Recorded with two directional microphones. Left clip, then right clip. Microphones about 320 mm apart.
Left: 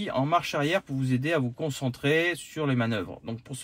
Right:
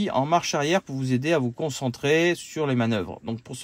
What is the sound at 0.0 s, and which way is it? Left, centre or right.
Speech, right.